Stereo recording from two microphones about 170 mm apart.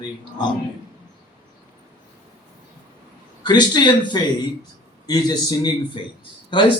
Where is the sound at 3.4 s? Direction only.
25° left (ahead or behind).